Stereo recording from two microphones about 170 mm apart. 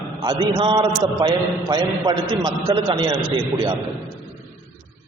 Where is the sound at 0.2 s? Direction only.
25° right (ahead or behind).